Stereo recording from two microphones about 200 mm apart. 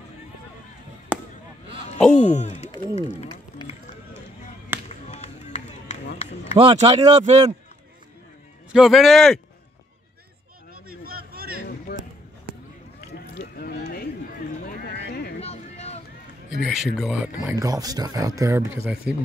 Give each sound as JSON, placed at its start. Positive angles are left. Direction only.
{"t": 1.1, "sound": "a sound", "side_deg": -5}
{"t": 2.0, "sound": "speech", "side_deg": 35}
{"t": 2.7, "sound": "run", "side_deg": 25}
{"t": 4.8, "sound": "music", "side_deg": 35}
{"t": 6.5, "sound": "speech", "side_deg": -25}
{"t": 8.7, "sound": "speech", "side_deg": 0}
{"t": 10.9, "sound": "a sound", "side_deg": -50}
{"t": 11.9, "sound": "basketball bounce", "side_deg": 55}
{"t": 13.6, "sound": "a sound", "side_deg": 50}
{"t": 15.4, "sound": "a sound", "side_deg": 30}
{"t": 16.6, "sound": "speech", "side_deg": 0}
{"t": 17.6, "sound": "speech", "side_deg": -15}